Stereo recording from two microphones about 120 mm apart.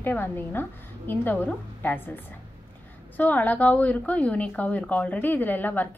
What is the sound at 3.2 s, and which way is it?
A woman's voice, 15° left (ahead or behind).